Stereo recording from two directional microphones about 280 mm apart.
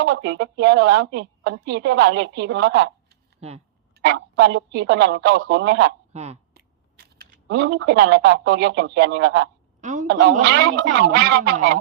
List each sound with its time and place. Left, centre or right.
0.0 s a woman's voice: right
6.1 s speech: right
9.8 s a sound: right
10.1 s a woman's voice: right